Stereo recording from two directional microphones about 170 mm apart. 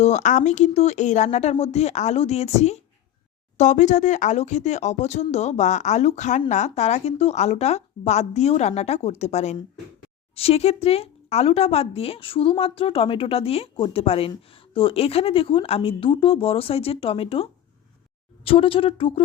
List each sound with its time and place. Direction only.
0.0 s speech: 45° left (ahead or behind)